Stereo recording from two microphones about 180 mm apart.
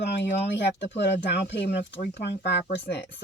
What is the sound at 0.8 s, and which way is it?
Speech, 70° left (ahead or behind).